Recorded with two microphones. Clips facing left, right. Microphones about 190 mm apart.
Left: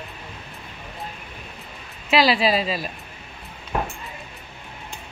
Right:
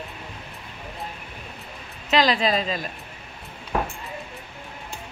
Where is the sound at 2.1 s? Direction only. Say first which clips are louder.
Left 2 dB; 10° left (ahead or behind).